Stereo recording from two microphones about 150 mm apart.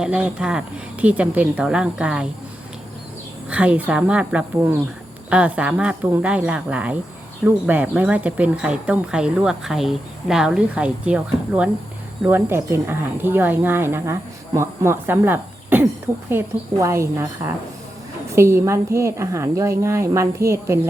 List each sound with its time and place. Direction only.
0.0 s a woman's voice: 5° right (ahead or behind)
3.5 s a woman's voice: 10° right (ahead or behind)